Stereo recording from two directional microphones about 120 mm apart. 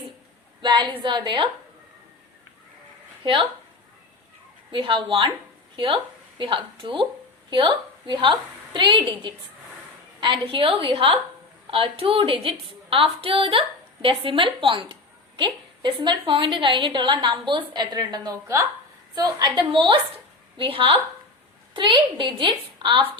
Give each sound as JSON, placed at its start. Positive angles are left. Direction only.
{"t": 0.6, "sound": "a woman's voice", "side_deg": -45}
{"t": 4.7, "sound": "a woman's voice", "side_deg": -45}